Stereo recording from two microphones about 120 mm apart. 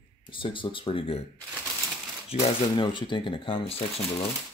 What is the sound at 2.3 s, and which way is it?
Speech, 60° left (ahead or behind).